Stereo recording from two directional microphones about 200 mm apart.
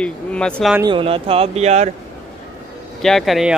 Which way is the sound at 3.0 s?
Centre (ahead or behind).